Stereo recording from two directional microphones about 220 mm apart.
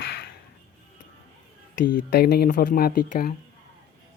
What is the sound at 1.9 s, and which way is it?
Speech, 45° left (ahead or behind).